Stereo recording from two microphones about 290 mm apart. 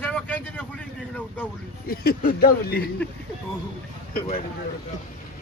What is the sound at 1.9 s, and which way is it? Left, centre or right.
Speech, left.